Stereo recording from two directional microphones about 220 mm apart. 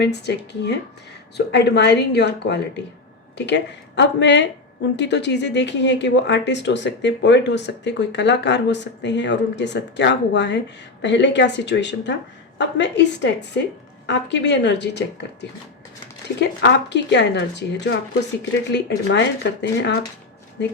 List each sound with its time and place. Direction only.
0.0 s speech: 50° left (ahead or behind)